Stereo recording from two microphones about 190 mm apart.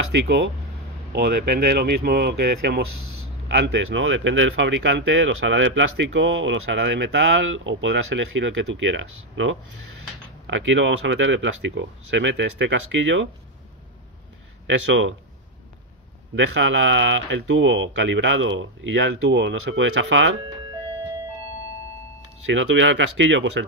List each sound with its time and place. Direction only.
0.1 s speech: 65° right (ahead or behind); by 13.3 s 80° right
14.7 s speech: 85° right
16.3 s speech: 85° right
22.5 s speech: 80° right